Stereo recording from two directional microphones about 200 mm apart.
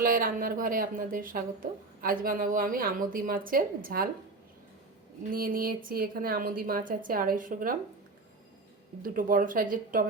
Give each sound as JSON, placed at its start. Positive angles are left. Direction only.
{"t": 0.0, "sound": "speech", "side_deg": -45}
{"t": 5.3, "sound": "speech", "side_deg": -45}
{"t": 9.0, "sound": "speech", "side_deg": -45}